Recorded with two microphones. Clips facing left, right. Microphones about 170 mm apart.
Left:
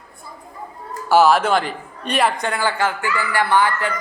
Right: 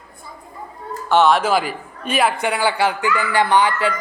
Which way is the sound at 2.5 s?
15° right (ahead or behind).